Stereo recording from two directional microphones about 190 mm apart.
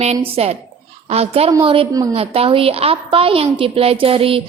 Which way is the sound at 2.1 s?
30° right (ahead or behind).